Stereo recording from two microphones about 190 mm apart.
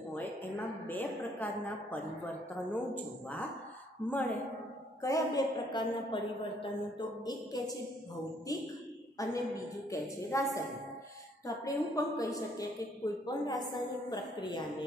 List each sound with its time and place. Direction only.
0.1 s a woman's voice: 10° left (ahead or behind)
5.0 s a woman's voice: 20° left (ahead or behind)